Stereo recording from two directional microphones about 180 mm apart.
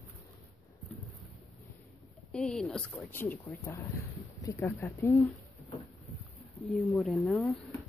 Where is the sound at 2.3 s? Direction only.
Centre (ahead or behind).